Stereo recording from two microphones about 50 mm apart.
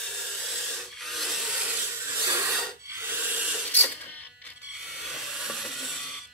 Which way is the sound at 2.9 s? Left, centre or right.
Right.